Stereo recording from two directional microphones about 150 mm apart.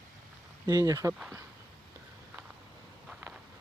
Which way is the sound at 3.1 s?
10° right (ahead or behind).